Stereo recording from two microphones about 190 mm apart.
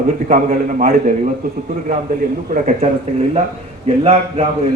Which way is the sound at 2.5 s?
40° right (ahead or behind).